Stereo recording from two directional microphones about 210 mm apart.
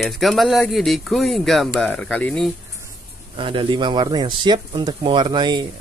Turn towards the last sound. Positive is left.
turn(degrees=-20)  # may be behind; listen again after turning